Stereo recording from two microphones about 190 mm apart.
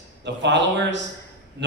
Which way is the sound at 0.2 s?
70° right (ahead or behind).